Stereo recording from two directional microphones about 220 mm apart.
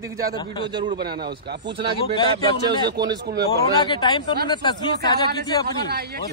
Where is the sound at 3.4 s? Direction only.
15° left (ahead or behind).